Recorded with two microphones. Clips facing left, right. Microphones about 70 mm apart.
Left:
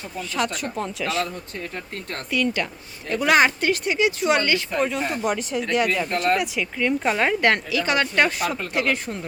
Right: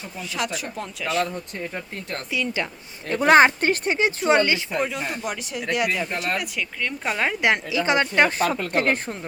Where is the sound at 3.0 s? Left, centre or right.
Right.